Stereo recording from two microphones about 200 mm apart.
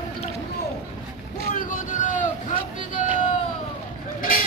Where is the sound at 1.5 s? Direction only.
45° left (ahead or behind).